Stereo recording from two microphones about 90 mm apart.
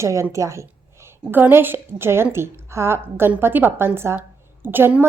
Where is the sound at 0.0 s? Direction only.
35° right (ahead or behind).